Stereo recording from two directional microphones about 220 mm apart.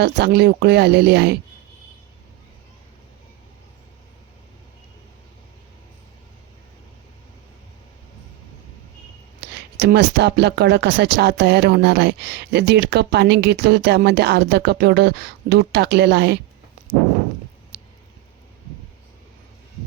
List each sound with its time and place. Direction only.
0.0 s speech: 50° right (ahead or behind)
9.7 s speech: 50° right (ahead or behind)